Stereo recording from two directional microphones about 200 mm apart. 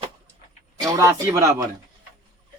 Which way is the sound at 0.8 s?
15° right (ahead or behind).